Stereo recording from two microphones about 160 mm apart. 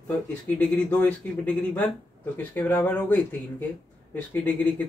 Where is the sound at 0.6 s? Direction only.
10° left (ahead or behind).